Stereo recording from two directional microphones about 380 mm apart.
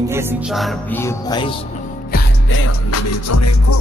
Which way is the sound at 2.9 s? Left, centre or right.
Left.